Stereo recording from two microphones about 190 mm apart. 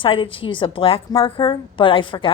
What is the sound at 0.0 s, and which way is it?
A woman's voice, 25° left (ahead or behind).